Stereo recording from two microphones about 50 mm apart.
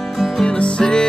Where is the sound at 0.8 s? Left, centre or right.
Centre.